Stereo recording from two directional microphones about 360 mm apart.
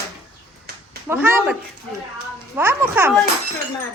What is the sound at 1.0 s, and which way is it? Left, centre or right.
Speech, centre.